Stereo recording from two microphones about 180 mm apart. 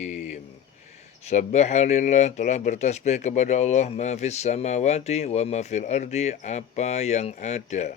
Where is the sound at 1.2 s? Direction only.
40° left (ahead or behind).